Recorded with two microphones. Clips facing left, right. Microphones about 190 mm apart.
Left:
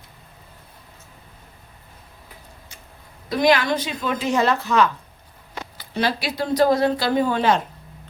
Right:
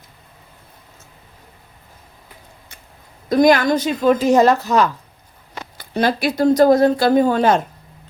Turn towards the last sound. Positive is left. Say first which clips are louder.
# right 5 dB
turn(degrees=-45)  # may be behind; listen again after turning